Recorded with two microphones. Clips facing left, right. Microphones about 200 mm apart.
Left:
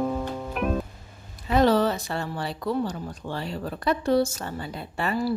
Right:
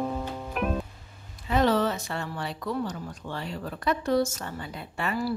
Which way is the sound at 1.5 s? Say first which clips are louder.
Left 3 dB; 35° left (ahead or behind).